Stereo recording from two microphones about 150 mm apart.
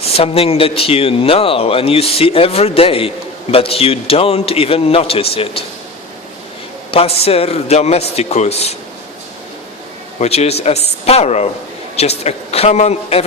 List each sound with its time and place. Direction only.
0.0 s speech: 40° left (ahead or behind)
6.9 s a man's voice: 40° left (ahead or behind)
10.2 s a man's voice: 45° left (ahead or behind)